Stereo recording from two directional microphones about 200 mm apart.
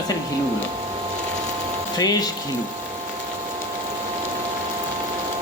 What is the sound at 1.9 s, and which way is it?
Speech, 20° left (ahead or behind).